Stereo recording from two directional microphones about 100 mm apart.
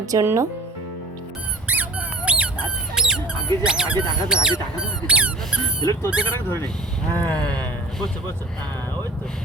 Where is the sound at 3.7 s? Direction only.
10° right (ahead or behind).